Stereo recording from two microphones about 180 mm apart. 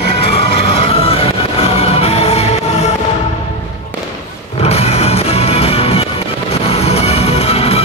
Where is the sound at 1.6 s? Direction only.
35° left (ahead or behind).